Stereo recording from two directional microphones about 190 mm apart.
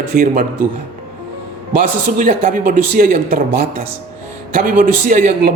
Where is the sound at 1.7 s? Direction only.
45° right (ahead or behind).